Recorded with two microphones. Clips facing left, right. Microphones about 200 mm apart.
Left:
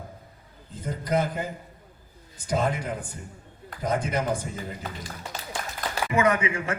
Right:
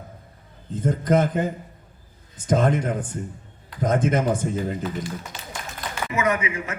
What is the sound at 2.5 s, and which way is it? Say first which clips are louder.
Speech: right 6 dB; 50° right (ahead or behind).